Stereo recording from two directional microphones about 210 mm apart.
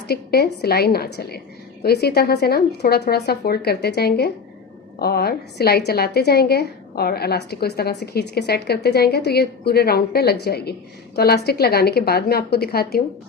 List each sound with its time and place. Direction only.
0.1 s a woman's voice: 50° left (ahead or behind)